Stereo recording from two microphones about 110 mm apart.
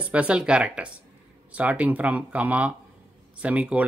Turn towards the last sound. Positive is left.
turn(degrees=-10)  # may be behind; listen again after turning